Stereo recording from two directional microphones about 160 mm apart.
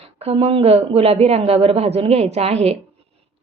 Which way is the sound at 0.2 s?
40° right (ahead or behind).